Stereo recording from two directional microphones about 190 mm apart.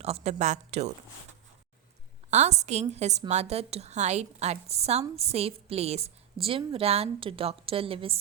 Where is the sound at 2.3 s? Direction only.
35° right (ahead or behind).